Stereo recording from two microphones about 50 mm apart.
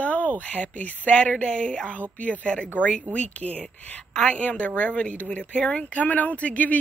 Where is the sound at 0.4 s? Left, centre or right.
Left.